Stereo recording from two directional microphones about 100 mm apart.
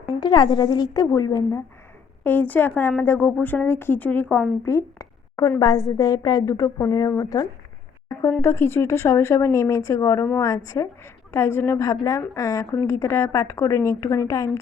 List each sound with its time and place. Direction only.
0.1 s a woman's voice: 45° left (ahead or behind)
2.2 s speech: 15° left (ahead or behind)
4.6 s a woman's voice: 30° left (ahead or behind)
11.9 s a woman's voice: 35° left (ahead or behind)